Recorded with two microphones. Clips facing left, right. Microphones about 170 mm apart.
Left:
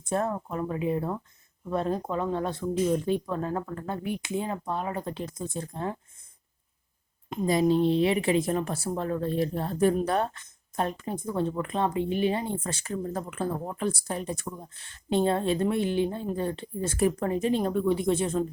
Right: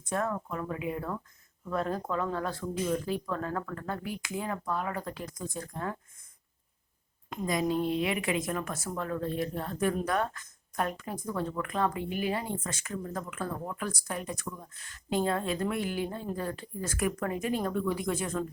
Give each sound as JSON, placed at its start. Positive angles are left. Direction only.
{"t": 0.0, "sound": "speech", "side_deg": 30}
{"t": 7.3, "sound": "speech", "side_deg": 25}